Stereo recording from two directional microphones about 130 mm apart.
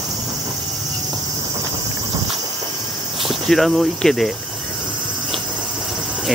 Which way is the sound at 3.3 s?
Centre (ahead or behind).